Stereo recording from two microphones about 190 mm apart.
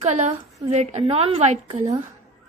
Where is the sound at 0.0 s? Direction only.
35° right (ahead or behind).